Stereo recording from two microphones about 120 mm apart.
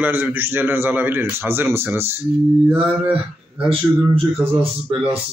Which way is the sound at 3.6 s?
10° right (ahead or behind).